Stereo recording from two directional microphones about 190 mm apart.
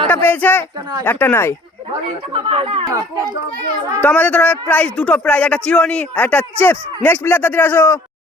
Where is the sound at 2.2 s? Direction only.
30° right (ahead or behind).